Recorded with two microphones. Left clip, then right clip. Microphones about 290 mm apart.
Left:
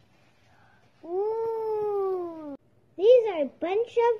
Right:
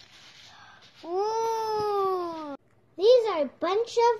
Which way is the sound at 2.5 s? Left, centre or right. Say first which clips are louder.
Right 2 dB; right.